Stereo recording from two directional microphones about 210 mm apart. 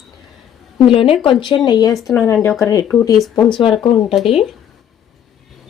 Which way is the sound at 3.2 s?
Centre (ahead or behind).